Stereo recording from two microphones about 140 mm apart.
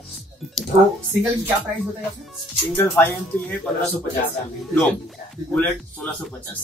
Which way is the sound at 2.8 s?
15° left (ahead or behind).